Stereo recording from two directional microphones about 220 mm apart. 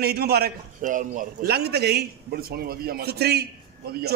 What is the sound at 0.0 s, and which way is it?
A man's voice, 45° right (ahead or behind).